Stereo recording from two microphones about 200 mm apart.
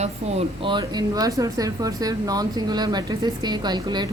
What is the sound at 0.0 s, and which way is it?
A woman's voice, 30° right (ahead or behind).